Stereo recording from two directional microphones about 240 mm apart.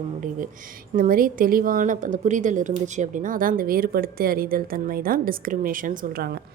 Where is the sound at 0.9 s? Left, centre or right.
Right.